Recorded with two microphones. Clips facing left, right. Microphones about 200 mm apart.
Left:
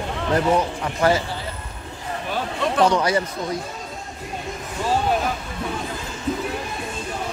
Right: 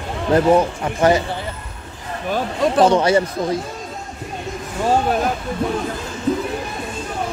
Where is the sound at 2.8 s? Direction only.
25° right (ahead or behind).